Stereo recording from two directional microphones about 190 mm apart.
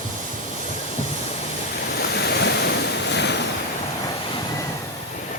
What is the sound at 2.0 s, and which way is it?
Waves, 60° left (ahead or behind).